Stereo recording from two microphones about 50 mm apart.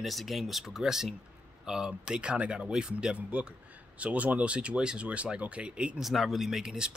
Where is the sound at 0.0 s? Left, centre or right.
Centre; by 5.9 s right.